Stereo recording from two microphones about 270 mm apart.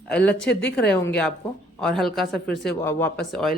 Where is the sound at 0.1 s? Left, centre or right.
Centre.